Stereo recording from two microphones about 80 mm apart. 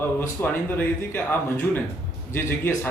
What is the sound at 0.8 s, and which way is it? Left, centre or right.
Speech, left.